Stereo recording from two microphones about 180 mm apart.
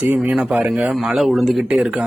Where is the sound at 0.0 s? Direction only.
10° right (ahead or behind).